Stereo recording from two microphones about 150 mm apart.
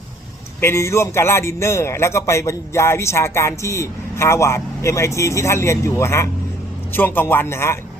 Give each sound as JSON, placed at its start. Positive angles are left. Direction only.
{"t": 0.6, "sound": "a man's voice", "side_deg": 15}